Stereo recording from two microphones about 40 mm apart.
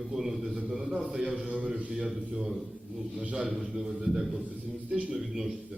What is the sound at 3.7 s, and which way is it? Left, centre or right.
A man's voice, centre.